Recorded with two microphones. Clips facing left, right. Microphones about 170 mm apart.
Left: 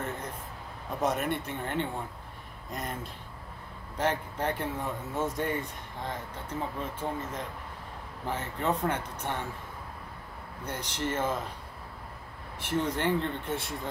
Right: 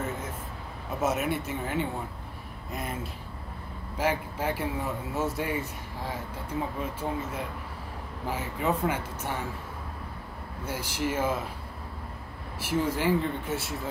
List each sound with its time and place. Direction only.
0.8 s speech: 5° right (ahead or behind)
10.6 s speech: 5° right (ahead or behind)
12.5 s speech: 5° right (ahead or behind)